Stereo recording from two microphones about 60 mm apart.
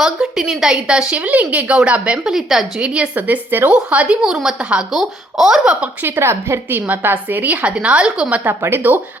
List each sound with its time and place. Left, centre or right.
0.0 s speech: centre
2.8 s a woman's voice: centre
5.8 s a woman's voice: right
6.7 s a woman's voice: right
8.4 s a woman's voice: right